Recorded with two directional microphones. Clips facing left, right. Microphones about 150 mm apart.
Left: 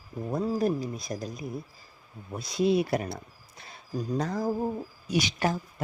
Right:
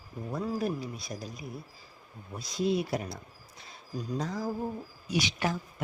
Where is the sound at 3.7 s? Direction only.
60° left (ahead or behind).